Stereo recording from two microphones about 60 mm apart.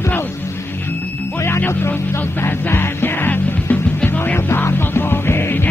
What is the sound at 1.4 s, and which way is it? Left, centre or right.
Music, left.